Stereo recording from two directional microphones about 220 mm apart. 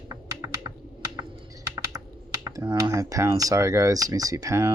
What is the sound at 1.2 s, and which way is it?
Typing, 15° right (ahead or behind).